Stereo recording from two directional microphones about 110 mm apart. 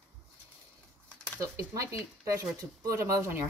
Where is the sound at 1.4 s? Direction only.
30° right (ahead or behind).